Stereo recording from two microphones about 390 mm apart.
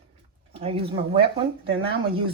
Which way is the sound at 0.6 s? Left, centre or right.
Centre.